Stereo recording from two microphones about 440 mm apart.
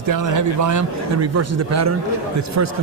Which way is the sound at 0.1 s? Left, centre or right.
Right.